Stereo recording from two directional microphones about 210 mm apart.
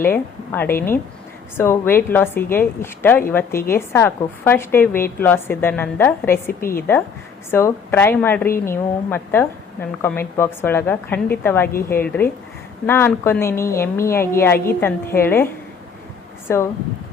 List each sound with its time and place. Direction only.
0.0 s a woman's voice: 10° left (ahead or behind)
7.5 s a woman's voice: 10° left (ahead or behind)